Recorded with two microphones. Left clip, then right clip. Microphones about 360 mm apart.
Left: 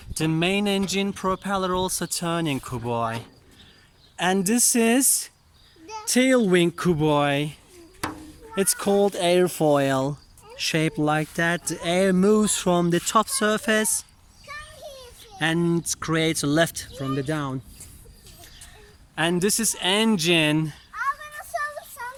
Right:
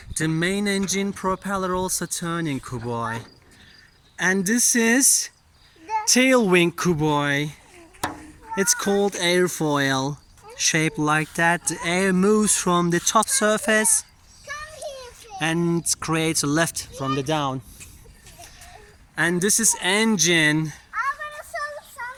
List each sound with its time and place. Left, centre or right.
0.1 s speech: centre
6.1 s speech: centre
8.5 s speech: centre
15.4 s speech: centre
19.1 s speech: centre
21.5 s child singing: centre